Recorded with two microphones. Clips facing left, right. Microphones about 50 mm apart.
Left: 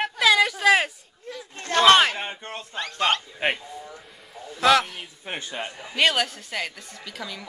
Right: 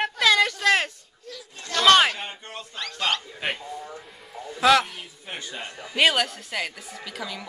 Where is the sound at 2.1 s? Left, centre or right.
Left.